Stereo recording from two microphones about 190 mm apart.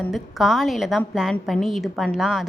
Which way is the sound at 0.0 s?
Centre (ahead or behind).